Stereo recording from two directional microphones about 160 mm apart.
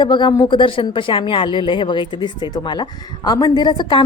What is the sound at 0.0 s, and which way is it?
A woman's voice, 30° left (ahead or behind).